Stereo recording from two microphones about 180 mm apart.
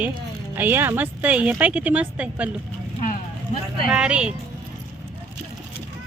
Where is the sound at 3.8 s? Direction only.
5° right (ahead or behind).